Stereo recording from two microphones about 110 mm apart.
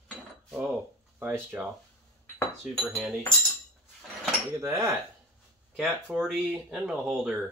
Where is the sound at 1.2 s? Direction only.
15° right (ahead or behind).